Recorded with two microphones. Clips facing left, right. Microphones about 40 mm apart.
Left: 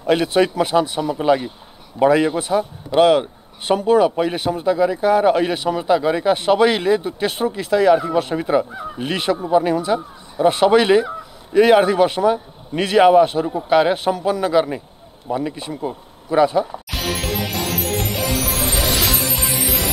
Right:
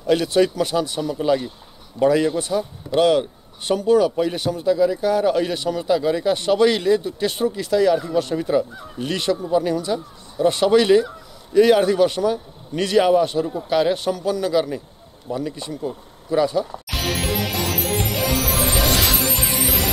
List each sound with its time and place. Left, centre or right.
0.0 s a man's voice: left
16.9 s music: centre